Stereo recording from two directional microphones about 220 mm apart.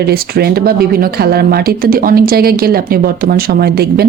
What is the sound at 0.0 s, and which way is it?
Speech, 45° right (ahead or behind).